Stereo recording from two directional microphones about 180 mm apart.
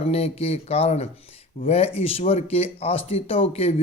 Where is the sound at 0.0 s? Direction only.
35° left (ahead or behind).